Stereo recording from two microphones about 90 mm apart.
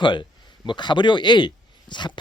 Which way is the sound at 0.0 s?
55° left (ahead or behind).